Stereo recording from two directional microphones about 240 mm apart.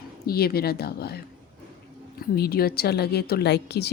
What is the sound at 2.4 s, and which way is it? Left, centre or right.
A child's voice, left.